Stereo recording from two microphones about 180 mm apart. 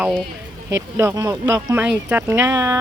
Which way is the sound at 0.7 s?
15° right (ahead or behind).